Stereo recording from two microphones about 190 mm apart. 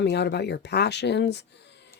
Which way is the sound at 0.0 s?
65° left (ahead or behind).